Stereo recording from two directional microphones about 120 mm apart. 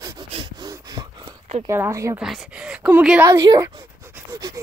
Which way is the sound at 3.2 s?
25° right (ahead or behind).